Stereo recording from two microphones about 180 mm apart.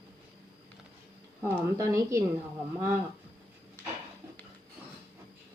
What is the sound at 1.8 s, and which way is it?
Speech, 15° right (ahead or behind).